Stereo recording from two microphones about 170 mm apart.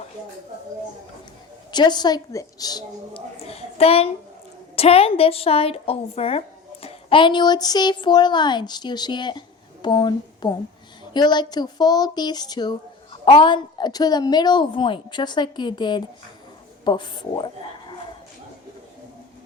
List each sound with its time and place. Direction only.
1.7 s a woman's voice: 25° left (ahead or behind)
3.4 s a woman's voice: 35° left (ahead or behind)